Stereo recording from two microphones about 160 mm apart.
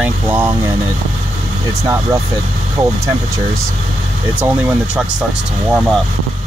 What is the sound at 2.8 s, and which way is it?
Speech, 25° right (ahead or behind).